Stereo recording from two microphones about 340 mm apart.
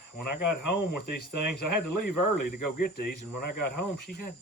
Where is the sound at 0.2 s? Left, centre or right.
Left.